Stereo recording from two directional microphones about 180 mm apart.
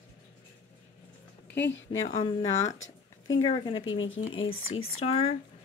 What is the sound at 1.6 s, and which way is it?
Speech, 90° left.